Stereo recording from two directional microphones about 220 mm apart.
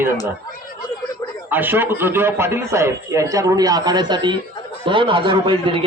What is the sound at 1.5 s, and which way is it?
A man's voice, 10° right (ahead or behind).